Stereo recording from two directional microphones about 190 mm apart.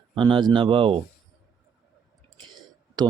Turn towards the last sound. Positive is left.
turn(degrees=-20)  # may be behind; listen again after turning